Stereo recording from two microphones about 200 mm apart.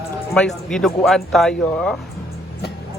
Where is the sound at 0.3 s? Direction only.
5° left (ahead or behind).